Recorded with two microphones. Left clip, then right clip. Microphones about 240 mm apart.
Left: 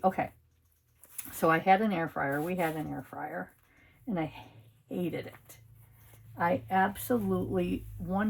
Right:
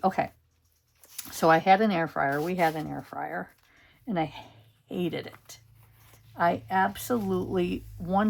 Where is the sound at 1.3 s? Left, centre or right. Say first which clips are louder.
Right 4 dB; right.